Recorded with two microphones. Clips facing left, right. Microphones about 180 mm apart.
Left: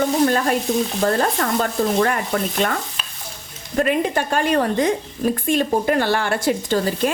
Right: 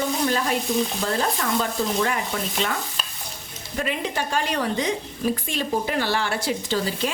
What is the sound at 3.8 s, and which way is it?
Stir, 50° left (ahead or behind).